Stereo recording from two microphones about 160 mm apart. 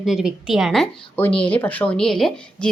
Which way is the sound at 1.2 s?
10° left (ahead or behind).